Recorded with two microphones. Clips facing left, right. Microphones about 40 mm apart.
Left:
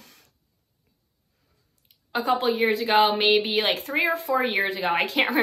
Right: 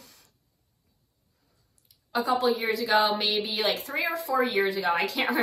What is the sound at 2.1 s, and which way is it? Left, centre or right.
A woman's voice, left.